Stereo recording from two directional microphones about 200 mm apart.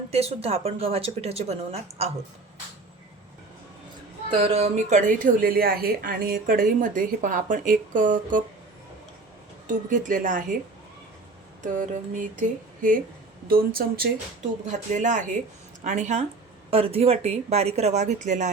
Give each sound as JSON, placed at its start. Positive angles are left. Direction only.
{"t": 0.1, "sound": "speech", "side_deg": -30}
{"t": 4.4, "sound": "speech", "side_deg": -30}
{"t": 9.6, "sound": "speech", "side_deg": -40}
{"t": 11.6, "sound": "speech", "side_deg": -40}
{"t": 14.7, "sound": "speech", "side_deg": -35}